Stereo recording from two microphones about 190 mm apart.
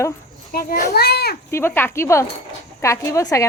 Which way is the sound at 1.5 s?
15° left (ahead or behind).